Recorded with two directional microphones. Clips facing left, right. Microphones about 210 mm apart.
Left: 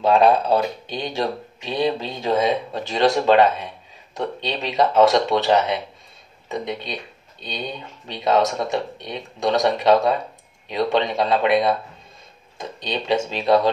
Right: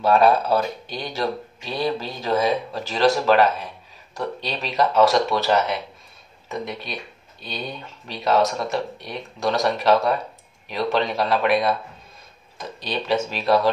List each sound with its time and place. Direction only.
0.0 s speech: 20° left (ahead or behind)
12.8 s speech: 20° left (ahead or behind)